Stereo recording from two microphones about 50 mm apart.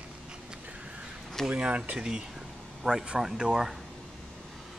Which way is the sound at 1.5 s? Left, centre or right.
Right.